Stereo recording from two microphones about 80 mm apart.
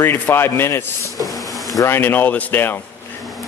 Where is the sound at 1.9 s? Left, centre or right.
Left.